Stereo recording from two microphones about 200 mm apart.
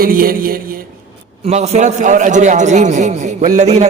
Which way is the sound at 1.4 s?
35° right (ahead or behind).